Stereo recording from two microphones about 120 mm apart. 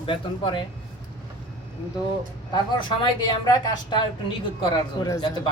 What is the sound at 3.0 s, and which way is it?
Speech, 35° left (ahead or behind).